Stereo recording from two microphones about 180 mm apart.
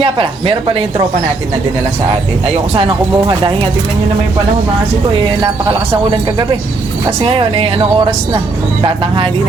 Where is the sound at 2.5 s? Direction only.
35° right (ahead or behind).